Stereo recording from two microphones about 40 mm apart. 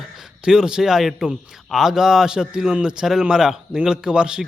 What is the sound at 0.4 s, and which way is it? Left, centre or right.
Speech, centre.